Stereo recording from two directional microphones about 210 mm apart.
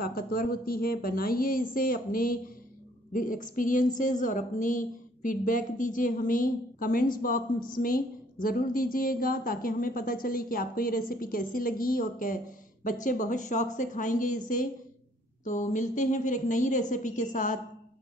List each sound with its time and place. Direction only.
0.0 s a woman's voice: 45° left (ahead or behind)
15.4 s a woman's voice: 35° left (ahead or behind)